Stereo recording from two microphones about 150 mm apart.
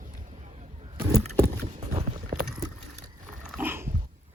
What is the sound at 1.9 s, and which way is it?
Clip-clop, 40° right (ahead or behind).